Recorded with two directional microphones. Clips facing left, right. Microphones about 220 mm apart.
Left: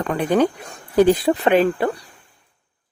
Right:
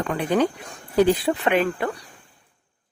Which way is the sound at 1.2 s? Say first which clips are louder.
Left 5 dB; 30° left (ahead or behind).